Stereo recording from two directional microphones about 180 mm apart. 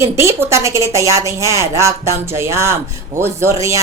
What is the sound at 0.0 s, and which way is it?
Speech, 15° right (ahead or behind).